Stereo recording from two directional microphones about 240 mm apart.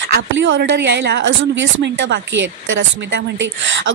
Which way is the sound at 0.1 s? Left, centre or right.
Right.